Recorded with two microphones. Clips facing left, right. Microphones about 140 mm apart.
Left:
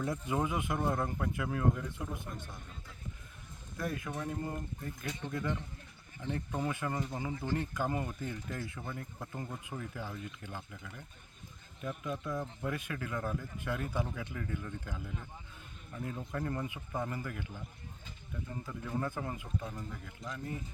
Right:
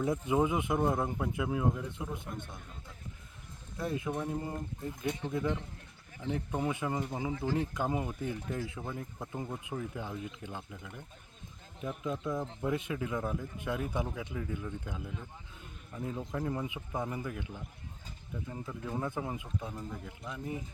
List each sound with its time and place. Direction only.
0.0 s speech: 20° right (ahead or behind)
3.8 s speech: 25° right (ahead or behind)
6.5 s speech: 15° right (ahead or behind)
7.3 s speech: 90° right
7.7 s speech: 15° right (ahead or behind)
12.0 s speech: 25° right (ahead or behind)
18.5 s speech: 15° right (ahead or behind)